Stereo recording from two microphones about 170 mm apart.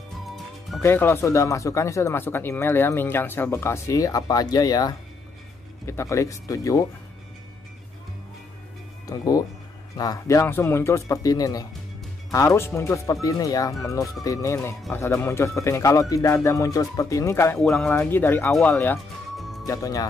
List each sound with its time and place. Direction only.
0.8 s speech: 15° left (ahead or behind)
9.0 s speech: 20° left (ahead or behind)
17.6 s speech: 5° left (ahead or behind)
19.3 s music: centre (ahead or behind)
19.6 s speech: 20° left (ahead or behind)